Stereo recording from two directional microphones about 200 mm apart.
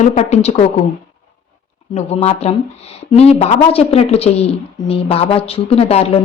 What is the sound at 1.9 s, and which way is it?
Speech, 30° left (ahead or behind).